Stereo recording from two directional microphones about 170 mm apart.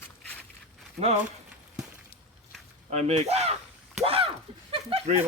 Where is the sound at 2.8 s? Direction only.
40° right (ahead or behind).